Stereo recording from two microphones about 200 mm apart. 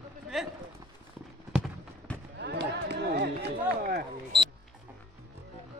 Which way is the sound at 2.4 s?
55° right (ahead or behind).